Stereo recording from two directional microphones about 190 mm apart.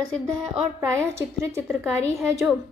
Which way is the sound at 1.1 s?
15° right (ahead or behind).